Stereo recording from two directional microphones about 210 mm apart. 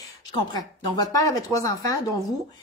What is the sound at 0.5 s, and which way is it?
Speech, 20° left (ahead or behind).